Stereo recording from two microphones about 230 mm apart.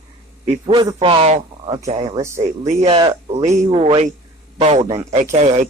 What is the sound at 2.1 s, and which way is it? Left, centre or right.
Speech, centre.